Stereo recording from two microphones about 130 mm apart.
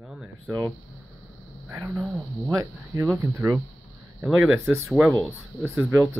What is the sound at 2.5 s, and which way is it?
Speech, 25° right (ahead or behind).